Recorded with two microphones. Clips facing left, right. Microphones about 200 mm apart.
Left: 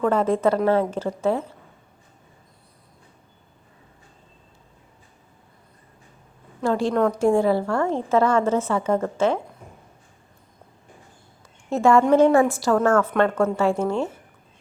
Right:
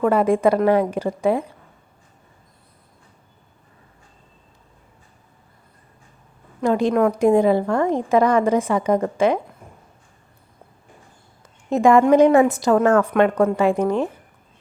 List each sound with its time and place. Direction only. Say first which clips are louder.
0.0 s a woman's voice: right 3 dB; 10° right (ahead or behind)
6.6 s a woman's voice: right 3 dB; 15° right (ahead or behind)
11.7 s a woman's voice: right 3 dB; 15° right (ahead or behind)